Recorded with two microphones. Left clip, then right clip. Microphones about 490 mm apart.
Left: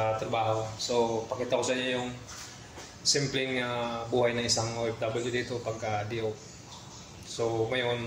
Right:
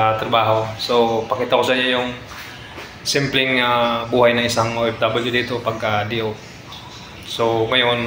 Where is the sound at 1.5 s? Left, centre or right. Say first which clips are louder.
Right 12 dB; left.